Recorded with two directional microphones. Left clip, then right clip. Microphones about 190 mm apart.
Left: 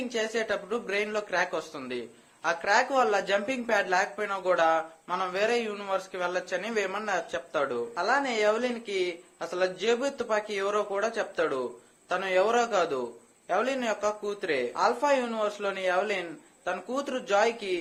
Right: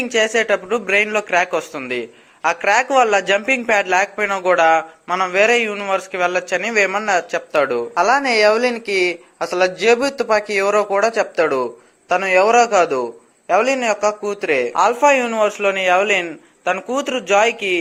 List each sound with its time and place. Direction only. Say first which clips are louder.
0.1 s a man's voice: right 14 dB; 30° right (ahead or behind)
7.9 s a man's voice: right 12 dB; 40° right (ahead or behind)